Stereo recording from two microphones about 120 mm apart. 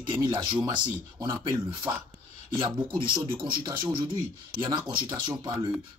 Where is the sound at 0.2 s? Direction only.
40° right (ahead or behind).